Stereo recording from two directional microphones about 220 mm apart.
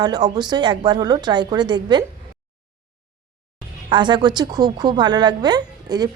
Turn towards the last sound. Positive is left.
turn(degrees=-20)  # may be behind; listen again after turning